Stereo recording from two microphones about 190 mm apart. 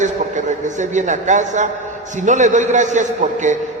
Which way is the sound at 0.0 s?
40° right (ahead or behind).